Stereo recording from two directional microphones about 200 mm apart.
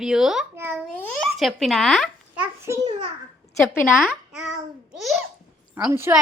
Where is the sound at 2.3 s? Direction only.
10° right (ahead or behind).